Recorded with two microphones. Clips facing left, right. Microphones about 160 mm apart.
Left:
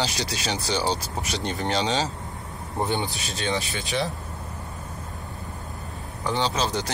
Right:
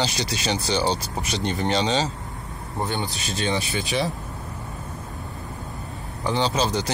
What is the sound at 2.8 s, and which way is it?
Speech, 20° left (ahead or behind).